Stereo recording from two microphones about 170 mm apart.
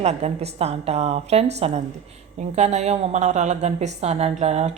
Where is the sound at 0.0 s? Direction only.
40° right (ahead or behind).